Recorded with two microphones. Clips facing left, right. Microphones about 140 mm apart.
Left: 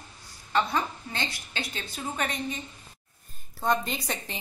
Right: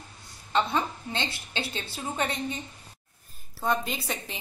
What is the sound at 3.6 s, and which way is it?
Speech, 5° right (ahead or behind).